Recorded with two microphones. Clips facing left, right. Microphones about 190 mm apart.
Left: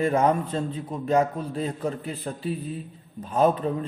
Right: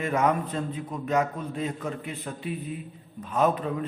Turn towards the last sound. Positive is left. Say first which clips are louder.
# left 3 dB
turn(degrees=30)  # may be behind; listen again after turning